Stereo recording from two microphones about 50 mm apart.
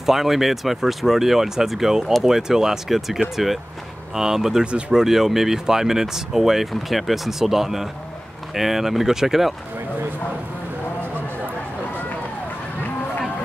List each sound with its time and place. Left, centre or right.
0.0 s speech: centre
4.6 s speech: right
4.9 s speech: centre